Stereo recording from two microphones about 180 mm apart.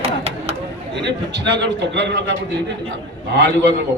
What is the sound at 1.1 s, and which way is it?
A man's voice, 75° right (ahead or behind).